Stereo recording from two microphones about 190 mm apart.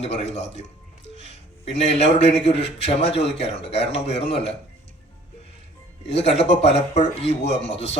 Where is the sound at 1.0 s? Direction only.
70° left (ahead or behind).